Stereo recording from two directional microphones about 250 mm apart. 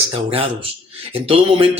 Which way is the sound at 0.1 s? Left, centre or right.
Right.